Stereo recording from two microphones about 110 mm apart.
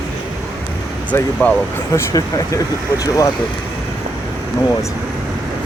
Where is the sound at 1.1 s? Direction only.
20° left (ahead or behind).